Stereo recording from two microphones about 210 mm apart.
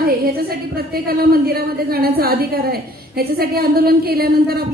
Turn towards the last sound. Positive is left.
turn(degrees=-45)  # may be behind; listen again after turning